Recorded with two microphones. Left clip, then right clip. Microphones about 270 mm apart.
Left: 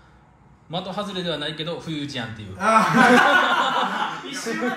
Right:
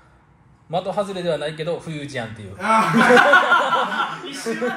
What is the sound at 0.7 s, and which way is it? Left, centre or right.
A man's voice, right.